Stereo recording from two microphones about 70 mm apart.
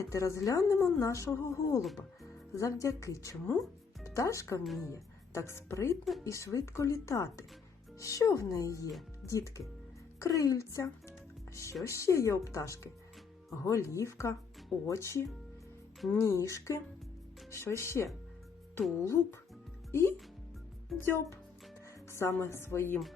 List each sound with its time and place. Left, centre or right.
0.1 s a woman's voice: left
10.2 s a woman's voice: left